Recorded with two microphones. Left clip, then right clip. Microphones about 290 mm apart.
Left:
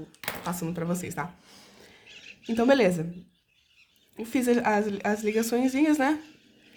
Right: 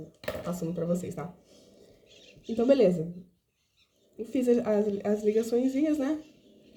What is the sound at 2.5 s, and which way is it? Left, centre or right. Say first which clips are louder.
Speech: left 1 dB; centre.